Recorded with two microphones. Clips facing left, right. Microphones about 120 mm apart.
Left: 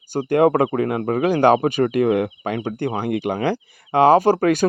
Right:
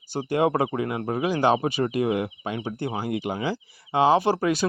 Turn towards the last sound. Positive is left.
turn(degrees=50)  # may be behind; listen again after turning